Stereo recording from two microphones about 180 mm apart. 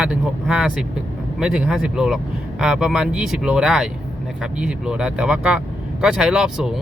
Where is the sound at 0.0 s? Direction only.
5° right (ahead or behind).